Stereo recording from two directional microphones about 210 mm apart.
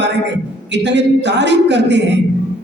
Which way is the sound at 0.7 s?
55° right (ahead or behind).